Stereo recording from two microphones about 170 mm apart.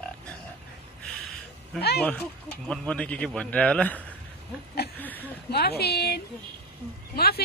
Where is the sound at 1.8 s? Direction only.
70° left (ahead or behind).